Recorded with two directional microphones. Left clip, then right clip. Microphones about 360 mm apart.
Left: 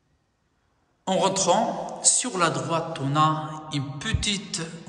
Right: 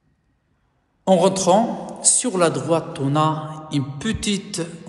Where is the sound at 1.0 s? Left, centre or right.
Centre.